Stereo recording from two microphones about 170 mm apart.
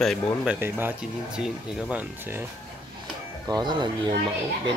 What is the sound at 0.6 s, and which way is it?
Speech, 10° right (ahead or behind).